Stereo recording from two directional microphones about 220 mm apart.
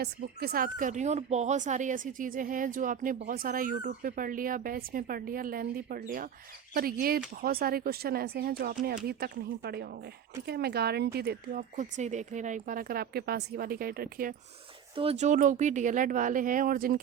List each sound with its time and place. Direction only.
0.0 s speech: 45° right (ahead or behind)
14.9 s speech: 30° right (ahead or behind)